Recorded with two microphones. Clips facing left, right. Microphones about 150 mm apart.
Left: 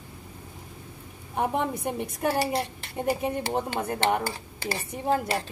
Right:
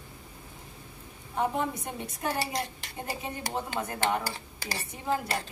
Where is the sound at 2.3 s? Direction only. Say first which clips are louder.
Left 5 dB; 35° left (ahead or behind).